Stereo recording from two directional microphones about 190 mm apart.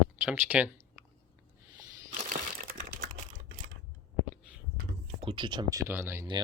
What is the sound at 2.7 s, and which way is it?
Typing, 45° right (ahead or behind).